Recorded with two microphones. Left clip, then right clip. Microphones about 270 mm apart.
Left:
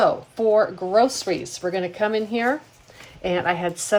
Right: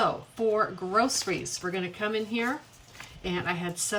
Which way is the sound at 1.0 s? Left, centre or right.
Centre.